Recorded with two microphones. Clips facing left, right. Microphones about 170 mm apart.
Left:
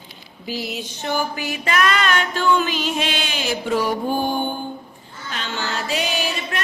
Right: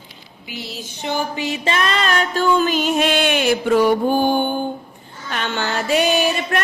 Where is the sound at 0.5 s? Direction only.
25° right (ahead or behind); by 3.9 s 60° right (ahead or behind).